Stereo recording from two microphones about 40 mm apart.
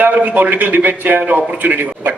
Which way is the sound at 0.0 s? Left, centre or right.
Right.